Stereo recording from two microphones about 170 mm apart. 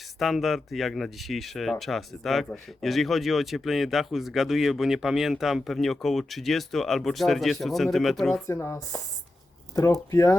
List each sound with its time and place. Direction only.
0.2 s speech: centre (ahead or behind)
8.4 s speech: 15° left (ahead or behind)